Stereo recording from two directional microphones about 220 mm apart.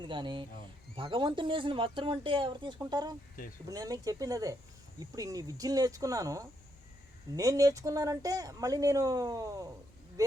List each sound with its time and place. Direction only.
0.0 s speech: 20° right (ahead or behind)